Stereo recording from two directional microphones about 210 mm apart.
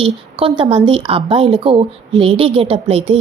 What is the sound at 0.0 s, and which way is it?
A woman's voice, 25° right (ahead or behind).